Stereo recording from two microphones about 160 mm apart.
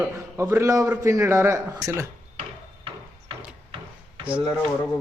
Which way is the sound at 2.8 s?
30° right (ahead or behind).